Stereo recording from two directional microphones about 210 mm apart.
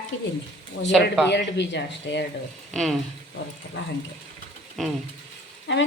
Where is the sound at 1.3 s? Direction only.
55° left (ahead or behind).